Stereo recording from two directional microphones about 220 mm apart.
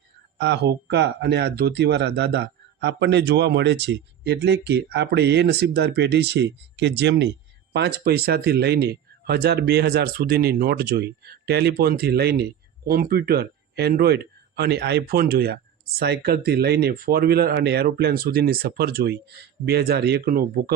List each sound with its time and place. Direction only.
0.3 s speech: 50° right (ahead or behind)